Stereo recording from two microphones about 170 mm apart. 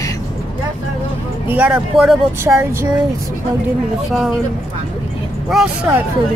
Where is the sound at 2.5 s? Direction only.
15° right (ahead or behind).